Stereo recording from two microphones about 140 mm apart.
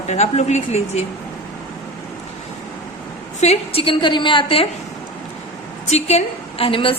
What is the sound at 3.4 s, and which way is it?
A woman's voice, 45° left (ahead or behind).